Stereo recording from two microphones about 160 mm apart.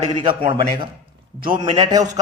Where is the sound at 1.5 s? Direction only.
30° right (ahead or behind).